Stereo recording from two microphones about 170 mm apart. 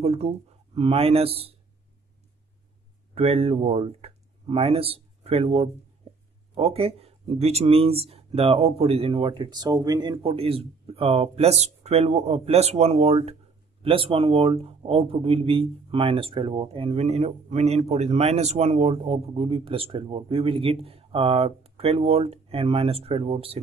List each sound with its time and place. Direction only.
0.0 s speech: 40° right (ahead or behind)
3.2 s speech: 35° right (ahead or behind)